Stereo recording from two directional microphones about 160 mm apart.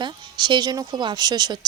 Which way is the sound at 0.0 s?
30° right (ahead or behind).